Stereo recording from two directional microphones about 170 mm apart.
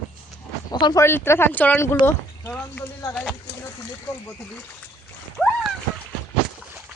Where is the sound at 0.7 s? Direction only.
25° left (ahead or behind).